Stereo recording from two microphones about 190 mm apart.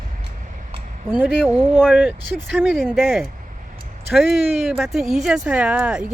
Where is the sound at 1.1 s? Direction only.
10° right (ahead or behind).